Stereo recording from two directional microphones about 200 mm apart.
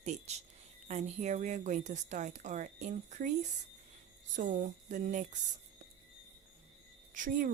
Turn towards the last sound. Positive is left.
turn(degrees=-40)  # may be behind; listen again after turning